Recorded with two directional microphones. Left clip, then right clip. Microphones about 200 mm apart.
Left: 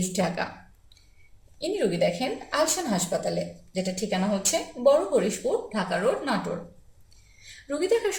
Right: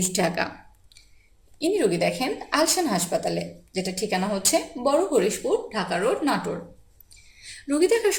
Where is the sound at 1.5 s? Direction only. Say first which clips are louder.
Right 3 dB; 45° right (ahead or behind).